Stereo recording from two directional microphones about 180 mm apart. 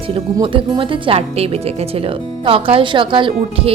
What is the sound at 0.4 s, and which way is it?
Speech, 30° right (ahead or behind).